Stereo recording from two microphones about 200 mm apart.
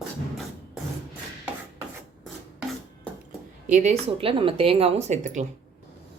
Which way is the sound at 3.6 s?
35° right (ahead or behind).